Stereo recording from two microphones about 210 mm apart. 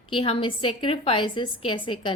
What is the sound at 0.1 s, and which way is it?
A woman's voice, 25° left (ahead or behind).